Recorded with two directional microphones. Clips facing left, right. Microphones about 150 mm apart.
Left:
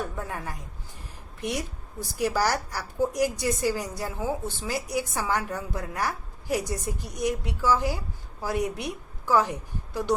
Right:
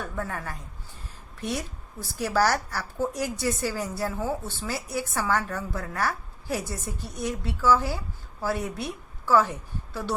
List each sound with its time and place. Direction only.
0.2 s a woman's voice: 15° left (ahead or behind)